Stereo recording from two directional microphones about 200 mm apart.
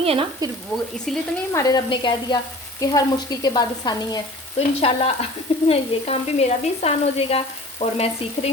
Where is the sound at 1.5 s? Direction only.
20° left (ahead or behind).